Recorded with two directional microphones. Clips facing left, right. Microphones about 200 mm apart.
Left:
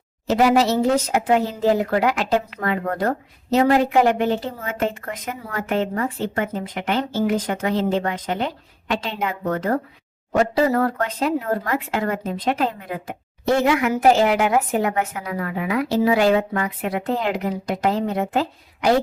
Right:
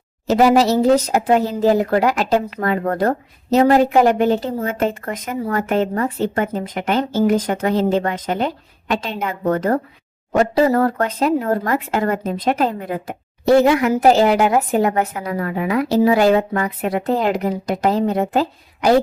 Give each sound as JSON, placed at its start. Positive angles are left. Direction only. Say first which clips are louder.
{"t": 0.3, "sound": "speech", "louder": "right 3 dB", "side_deg": -40}